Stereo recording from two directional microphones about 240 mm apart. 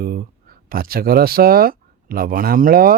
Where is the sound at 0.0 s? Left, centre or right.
Right.